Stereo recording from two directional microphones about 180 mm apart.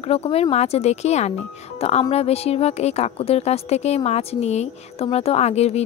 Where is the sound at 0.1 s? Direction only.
35° left (ahead or behind).